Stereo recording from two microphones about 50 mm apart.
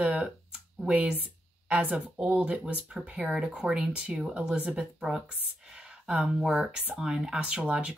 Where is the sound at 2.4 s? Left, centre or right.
Right.